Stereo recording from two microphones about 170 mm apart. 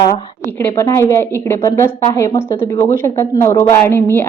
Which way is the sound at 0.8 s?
15° left (ahead or behind).